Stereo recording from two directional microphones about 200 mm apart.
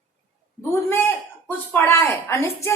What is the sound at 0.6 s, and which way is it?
A woman's voice, 10° left (ahead or behind).